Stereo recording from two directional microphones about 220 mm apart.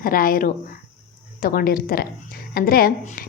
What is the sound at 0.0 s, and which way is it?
Speech, 40° left (ahead or behind).